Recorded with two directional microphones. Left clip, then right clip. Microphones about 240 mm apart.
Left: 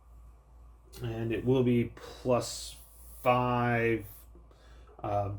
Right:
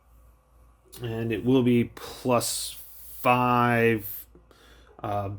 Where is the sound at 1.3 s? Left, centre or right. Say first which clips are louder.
Right 5 dB; right.